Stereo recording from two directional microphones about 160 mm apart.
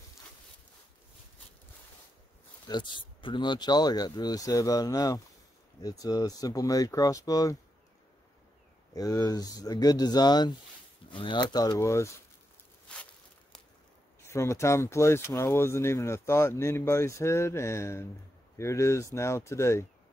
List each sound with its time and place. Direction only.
2.7 s speech: 30° left (ahead or behind)
8.9 s speech: 25° left (ahead or behind)
12.8 s a sound: 5° left (ahead or behind)
14.2 s speech: 20° left (ahead or behind)